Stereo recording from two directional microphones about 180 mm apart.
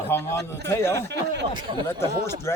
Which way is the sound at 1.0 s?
70° right (ahead or behind).